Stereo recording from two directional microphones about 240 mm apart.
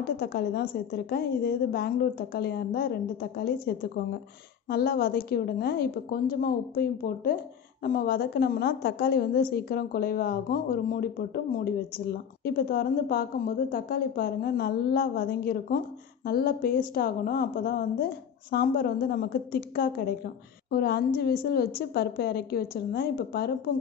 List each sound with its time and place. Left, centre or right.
0.2 s a woman's voice: left